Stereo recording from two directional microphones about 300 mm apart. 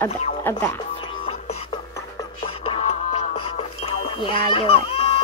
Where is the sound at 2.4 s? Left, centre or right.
Centre.